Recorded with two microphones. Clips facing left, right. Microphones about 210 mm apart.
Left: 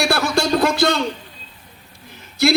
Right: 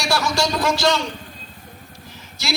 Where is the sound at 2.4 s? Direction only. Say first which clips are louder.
Left 10 dB; 60° left (ahead or behind).